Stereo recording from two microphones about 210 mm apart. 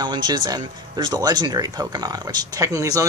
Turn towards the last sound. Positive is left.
turn(degrees=-15)  # may be behind; listen again after turning